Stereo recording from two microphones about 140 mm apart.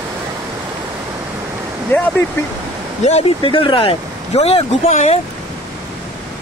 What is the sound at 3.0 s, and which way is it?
Speech, 45° left (ahead or behind).